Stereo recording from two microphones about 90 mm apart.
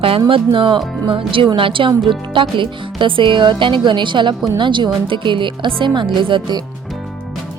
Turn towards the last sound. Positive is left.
turn(degrees=-60)  # may be behind; listen again after turning